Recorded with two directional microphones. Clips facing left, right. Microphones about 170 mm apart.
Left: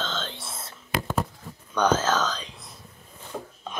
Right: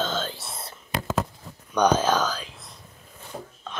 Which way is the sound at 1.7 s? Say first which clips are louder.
Right 2 dB; 15° right (ahead or behind).